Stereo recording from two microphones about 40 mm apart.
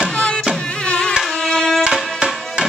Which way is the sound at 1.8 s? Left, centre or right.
Centre.